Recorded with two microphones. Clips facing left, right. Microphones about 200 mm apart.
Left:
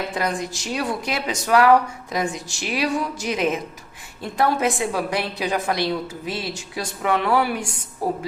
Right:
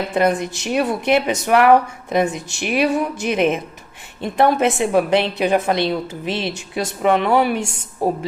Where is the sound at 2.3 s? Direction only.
60° right (ahead or behind).